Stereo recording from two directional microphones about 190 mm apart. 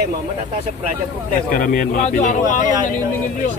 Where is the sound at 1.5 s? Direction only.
45° left (ahead or behind).